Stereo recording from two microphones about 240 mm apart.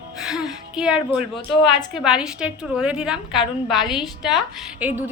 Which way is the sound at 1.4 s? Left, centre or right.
Centre.